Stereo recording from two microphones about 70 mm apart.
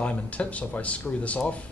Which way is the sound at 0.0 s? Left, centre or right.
Centre.